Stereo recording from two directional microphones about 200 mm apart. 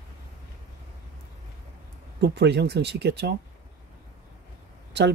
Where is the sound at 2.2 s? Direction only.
55° right (ahead or behind).